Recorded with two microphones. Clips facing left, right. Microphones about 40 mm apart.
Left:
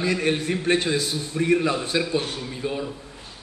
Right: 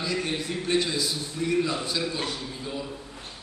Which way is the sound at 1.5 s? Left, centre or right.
Left.